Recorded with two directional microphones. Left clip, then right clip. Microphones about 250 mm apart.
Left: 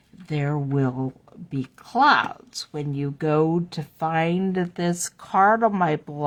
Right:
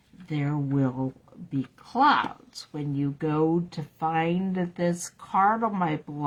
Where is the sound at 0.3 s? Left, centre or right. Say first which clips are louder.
Left 3 dB; left.